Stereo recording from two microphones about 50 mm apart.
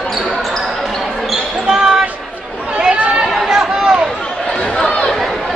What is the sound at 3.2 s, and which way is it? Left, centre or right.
Chatter, centre.